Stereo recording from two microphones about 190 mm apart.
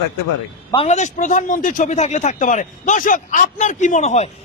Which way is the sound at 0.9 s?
40° left (ahead or behind).